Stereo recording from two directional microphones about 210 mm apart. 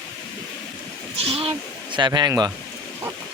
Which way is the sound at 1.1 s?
30° right (ahead or behind).